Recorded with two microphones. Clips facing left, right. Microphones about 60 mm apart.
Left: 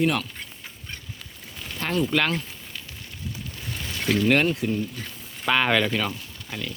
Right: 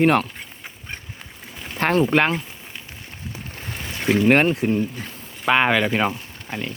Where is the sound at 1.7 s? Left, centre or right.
Right.